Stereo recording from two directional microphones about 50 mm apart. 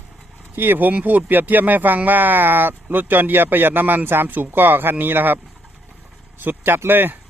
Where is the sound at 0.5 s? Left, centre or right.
Right.